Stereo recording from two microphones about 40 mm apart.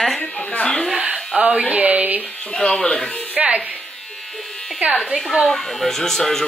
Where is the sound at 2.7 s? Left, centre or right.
Left.